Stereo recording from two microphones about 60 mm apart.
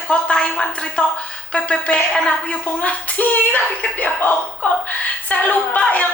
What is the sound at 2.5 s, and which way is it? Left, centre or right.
Speech, left.